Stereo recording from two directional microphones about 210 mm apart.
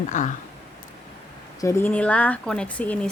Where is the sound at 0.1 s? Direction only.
35° left (ahead or behind).